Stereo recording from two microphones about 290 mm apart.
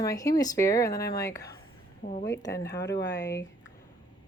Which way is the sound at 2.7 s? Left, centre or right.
Left.